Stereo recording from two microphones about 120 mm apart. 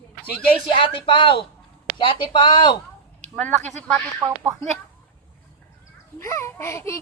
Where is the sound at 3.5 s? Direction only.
80° right.